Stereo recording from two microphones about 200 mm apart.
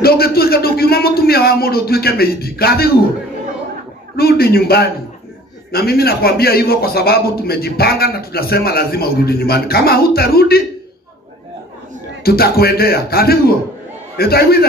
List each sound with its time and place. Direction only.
0.0 s a sound: 50° left (ahead or behind)
4.2 s a man's voice: 50° left (ahead or behind)
12.2 s a man's voice: 50° left (ahead or behind)